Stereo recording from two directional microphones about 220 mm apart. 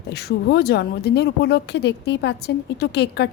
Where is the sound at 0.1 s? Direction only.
45° left (ahead or behind).